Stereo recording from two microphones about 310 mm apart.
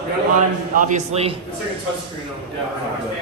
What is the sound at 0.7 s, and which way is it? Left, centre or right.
Speech, right.